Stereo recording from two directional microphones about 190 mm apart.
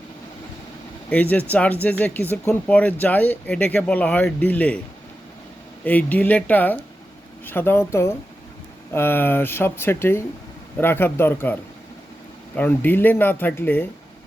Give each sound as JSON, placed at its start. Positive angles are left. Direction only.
{"t": 1.1, "sound": "speech", "side_deg": 10}
{"t": 5.8, "sound": "speech", "side_deg": 10}
{"t": 12.5, "sound": "speech", "side_deg": 10}